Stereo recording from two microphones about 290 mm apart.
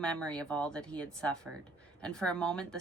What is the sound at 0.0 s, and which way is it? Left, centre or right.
A woman's voice, centre.